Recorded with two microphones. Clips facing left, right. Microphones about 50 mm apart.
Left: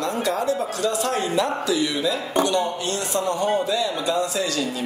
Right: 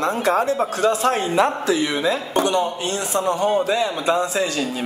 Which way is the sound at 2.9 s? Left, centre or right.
Right.